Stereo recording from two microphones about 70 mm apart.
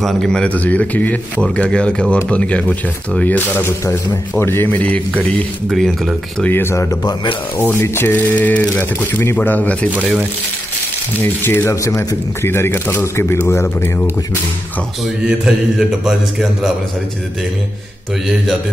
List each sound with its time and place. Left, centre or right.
0.0 s a man's voice: centre
0.5 s a man's voice: left
5.7 s a man's voice: centre
6.4 s speech: left
11.4 s speech: left
11.7 s a man's voice: left
12.4 s speech: left
15.2 s a man's voice: centre